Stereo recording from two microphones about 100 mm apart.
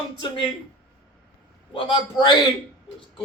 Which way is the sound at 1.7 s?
55° left (ahead or behind).